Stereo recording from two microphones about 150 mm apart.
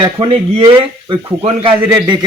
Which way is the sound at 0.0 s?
40° right (ahead or behind).